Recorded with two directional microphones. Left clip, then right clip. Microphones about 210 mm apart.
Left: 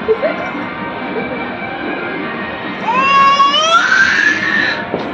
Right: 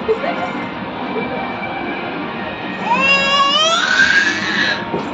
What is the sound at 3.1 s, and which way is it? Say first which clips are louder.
Music: left 7 dB; 25° right (ahead or behind).